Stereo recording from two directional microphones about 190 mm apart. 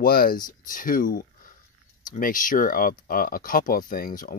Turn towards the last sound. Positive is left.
turn(degrees=50)  # may be behind; listen again after turning